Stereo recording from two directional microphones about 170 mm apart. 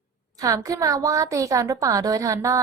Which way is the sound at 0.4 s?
20° right (ahead or behind).